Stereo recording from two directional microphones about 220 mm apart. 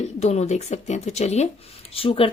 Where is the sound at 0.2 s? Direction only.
30° left (ahead or behind).